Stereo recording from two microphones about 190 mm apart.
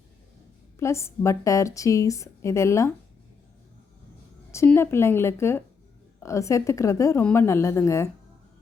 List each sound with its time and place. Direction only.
0.8 s a woman's voice: 15° left (ahead or behind)
4.5 s a woman's voice: 15° left (ahead or behind)